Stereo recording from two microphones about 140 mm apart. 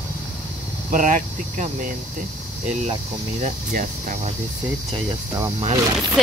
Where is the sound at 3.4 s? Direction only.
75° right (ahead or behind).